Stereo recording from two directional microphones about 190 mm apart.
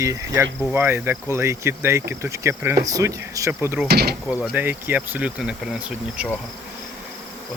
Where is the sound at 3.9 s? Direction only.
55° right (ahead or behind).